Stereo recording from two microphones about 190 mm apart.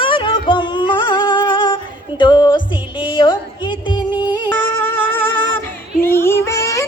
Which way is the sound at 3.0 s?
25° left (ahead or behind).